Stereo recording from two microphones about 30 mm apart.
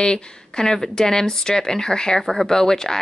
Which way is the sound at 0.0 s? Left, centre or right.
Left.